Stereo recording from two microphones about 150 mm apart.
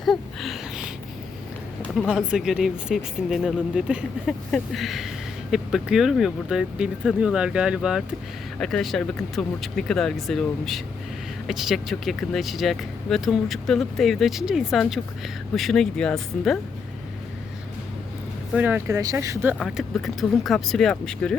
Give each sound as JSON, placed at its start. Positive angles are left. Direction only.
{"t": 0.0, "sound": "a sound", "side_deg": 0}
{"t": 2.0, "sound": "speech", "side_deg": -5}
{"t": 18.5, "sound": "speech", "side_deg": -10}
{"t": 19.5, "sound": "speech", "side_deg": 0}